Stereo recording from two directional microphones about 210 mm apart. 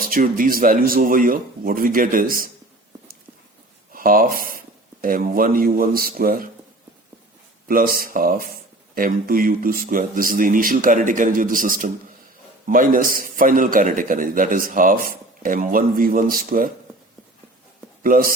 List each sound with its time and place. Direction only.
0.0 s a man's voice: 40° right (ahead or behind)
3.9 s speech: 40° right (ahead or behind)
7.7 s a man's voice: 40° right (ahead or behind)
18.0 s a man's voice: 40° right (ahead or behind)